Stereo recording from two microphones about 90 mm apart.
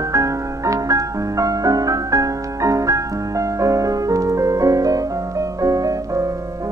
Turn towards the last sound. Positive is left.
turn(degrees=-40)  # may be behind; listen again after turning